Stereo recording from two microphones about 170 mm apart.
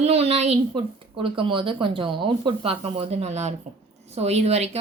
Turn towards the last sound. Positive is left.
turn(degrees=-40)  # may be behind; listen again after turning